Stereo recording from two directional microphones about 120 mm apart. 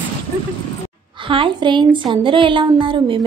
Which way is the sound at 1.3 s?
45° right (ahead or behind).